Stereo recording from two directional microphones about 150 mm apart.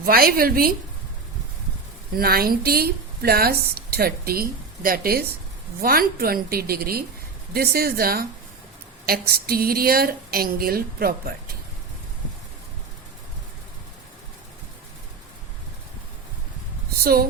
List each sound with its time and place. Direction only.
0.0 s a woman's voice: 80° right
2.1 s a woman's voice: 85° right
17.0 s speech: 90° right